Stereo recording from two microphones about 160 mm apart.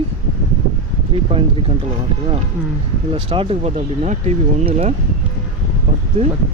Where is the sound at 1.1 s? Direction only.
35° right (ahead or behind).